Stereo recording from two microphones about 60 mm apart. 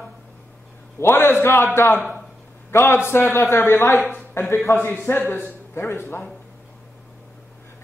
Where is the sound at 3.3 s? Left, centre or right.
Left.